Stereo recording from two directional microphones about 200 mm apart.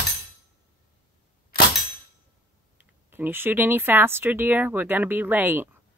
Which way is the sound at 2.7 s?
10° right (ahead or behind).